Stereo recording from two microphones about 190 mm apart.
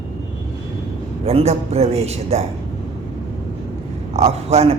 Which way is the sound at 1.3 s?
35° right (ahead or behind).